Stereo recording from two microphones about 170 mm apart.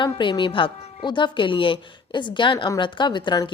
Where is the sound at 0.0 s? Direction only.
30° left (ahead or behind).